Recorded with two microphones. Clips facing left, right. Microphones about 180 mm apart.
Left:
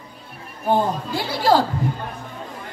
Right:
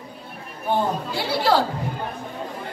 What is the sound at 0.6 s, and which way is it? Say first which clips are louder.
Speech: left 3 dB; 45° left (ahead or behind).